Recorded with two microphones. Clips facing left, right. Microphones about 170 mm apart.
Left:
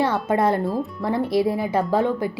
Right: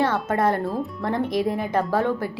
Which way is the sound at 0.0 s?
10° left (ahead or behind).